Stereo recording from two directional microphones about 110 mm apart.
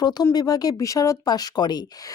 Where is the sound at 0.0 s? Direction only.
40° left (ahead or behind).